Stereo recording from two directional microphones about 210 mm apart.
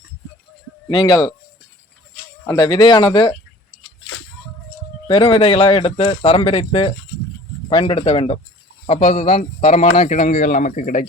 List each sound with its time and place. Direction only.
0.9 s a man's voice: 20° left (ahead or behind)
2.5 s a man's voice: 20° left (ahead or behind)
5.0 s a man's voice: 25° left (ahead or behind)